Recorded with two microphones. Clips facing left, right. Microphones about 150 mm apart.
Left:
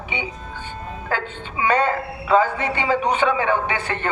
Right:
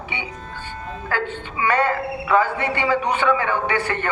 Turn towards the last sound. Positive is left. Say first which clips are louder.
# right 2 dB
turn(degrees=20)  # may be behind; listen again after turning